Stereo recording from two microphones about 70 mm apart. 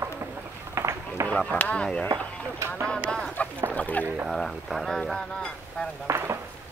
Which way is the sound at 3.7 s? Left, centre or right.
Left.